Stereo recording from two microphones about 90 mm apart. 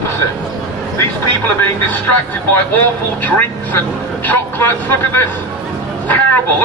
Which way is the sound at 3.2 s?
20° left (ahead or behind).